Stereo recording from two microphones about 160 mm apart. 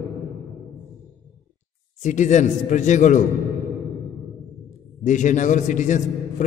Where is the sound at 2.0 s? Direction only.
50° left (ahead or behind).